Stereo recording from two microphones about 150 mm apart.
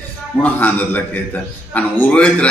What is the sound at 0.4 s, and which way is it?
A man's voice, 10° left (ahead or behind).